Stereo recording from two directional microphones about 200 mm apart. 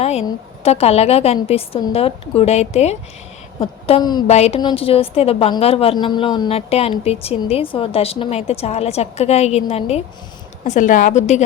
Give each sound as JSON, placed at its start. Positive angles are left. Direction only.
{"t": 0.0, "sound": "a woman's voice", "side_deg": 30}